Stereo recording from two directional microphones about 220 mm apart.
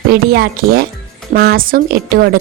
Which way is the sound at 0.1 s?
45° right (ahead or behind).